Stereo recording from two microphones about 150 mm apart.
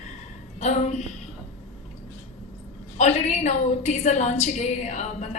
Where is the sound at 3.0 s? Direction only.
50° left (ahead or behind).